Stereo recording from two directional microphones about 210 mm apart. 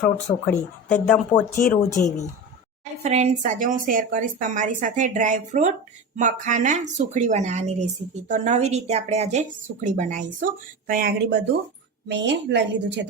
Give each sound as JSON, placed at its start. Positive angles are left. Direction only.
{"t": 0.0, "sound": "speech", "side_deg": 5}
{"t": 3.0, "sound": "speech", "side_deg": -30}
{"t": 12.0, "sound": "a woman's voice", "side_deg": -55}